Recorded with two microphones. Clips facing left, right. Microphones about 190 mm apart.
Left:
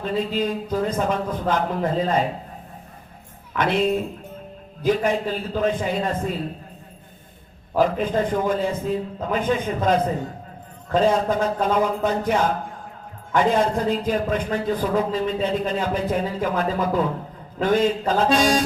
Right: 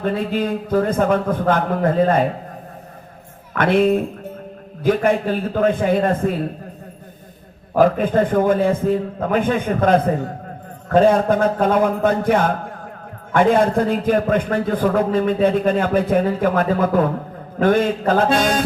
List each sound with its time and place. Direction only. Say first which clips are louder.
0.0 s a man's voice: right 3 dB; 55° right (ahead or behind)
3.6 s a man's voice: right 5 dB; 55° right (ahead or behind)
7.8 s a man's voice: right 5 dB; 55° right (ahead or behind)